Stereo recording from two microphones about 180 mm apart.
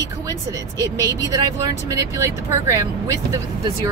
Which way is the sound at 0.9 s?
20° right (ahead or behind).